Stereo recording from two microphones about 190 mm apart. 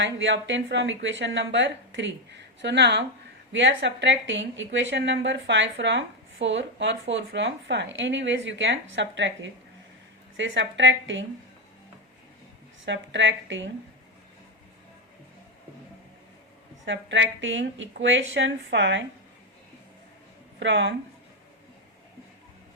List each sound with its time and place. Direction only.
0.0 s a woman's voice: 75° right (ahead or behind)
12.8 s a woman's voice: 75° right (ahead or behind)
16.8 s a woman's voice: 75° right (ahead or behind)
20.6 s a woman's voice: 70° right (ahead or behind)